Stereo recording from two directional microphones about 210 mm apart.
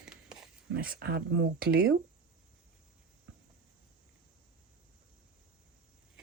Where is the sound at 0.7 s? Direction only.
45° right (ahead or behind).